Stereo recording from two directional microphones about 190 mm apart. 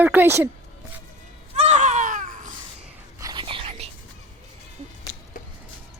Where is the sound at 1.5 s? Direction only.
35° right (ahead or behind).